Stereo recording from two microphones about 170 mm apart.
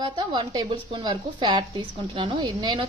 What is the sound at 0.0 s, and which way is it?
Speech, 25° right (ahead or behind).